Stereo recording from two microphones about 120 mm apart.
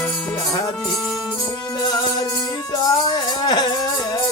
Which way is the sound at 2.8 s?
35° left (ahead or behind).